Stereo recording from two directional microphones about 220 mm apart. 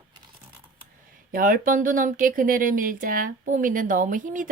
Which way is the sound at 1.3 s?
40° right (ahead or behind).